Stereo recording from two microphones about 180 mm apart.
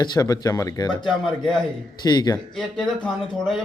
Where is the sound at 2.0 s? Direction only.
20° left (ahead or behind).